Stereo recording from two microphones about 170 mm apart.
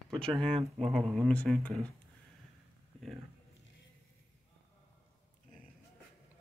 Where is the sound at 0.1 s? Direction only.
5° left (ahead or behind).